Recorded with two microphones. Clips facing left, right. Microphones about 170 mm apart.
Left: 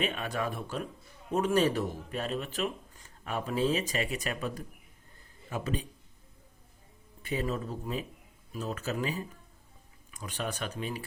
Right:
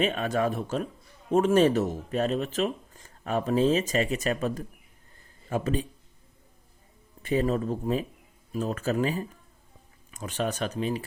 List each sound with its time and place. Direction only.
0.0 s speech: 45° right (ahead or behind)
7.2 s speech: 45° right (ahead or behind)